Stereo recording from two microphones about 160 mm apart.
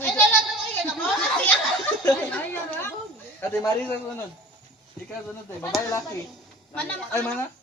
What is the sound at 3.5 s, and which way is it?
Male singing, 15° left (ahead or behind).